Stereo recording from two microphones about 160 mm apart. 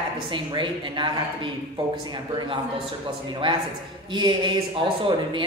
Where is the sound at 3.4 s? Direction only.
30° right (ahead or behind).